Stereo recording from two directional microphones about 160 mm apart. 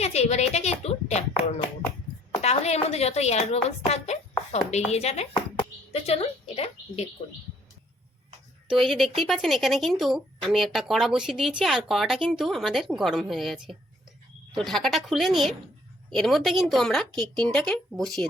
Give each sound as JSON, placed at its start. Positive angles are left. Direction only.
{"t": 0.0, "sound": "a woman's voice", "side_deg": 40}
{"t": 2.4, "sound": "a woman's voice", "side_deg": 40}
{"t": 8.7, "sound": "speech", "side_deg": 0}